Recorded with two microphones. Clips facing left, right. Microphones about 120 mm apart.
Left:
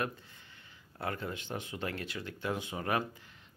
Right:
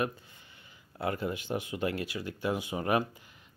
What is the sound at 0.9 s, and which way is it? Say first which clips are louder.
Speech: right 5 dB; 10° right (ahead or behind).